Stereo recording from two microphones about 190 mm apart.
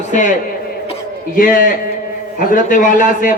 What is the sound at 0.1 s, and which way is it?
Speech, 40° left (ahead or behind).